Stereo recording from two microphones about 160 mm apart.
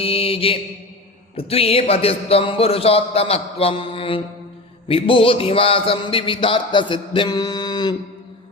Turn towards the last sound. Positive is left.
turn(degrees=25)  # may be behind; listen again after turning